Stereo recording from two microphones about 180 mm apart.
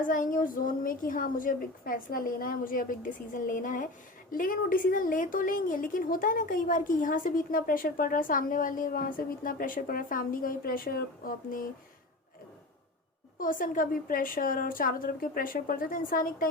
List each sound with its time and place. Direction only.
0.0 s a woman's voice: 50° left (ahead or behind)
13.4 s a woman's voice: 50° left (ahead or behind)